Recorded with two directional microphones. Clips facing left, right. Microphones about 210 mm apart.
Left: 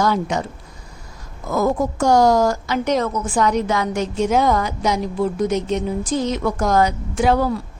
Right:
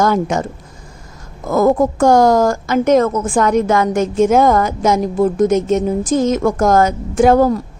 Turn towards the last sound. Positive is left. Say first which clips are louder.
# right 7 dB
turn(degrees=-45)  # may be behind; listen again after turning